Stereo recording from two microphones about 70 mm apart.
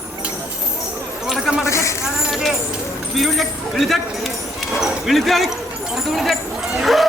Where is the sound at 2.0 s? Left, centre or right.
Centre.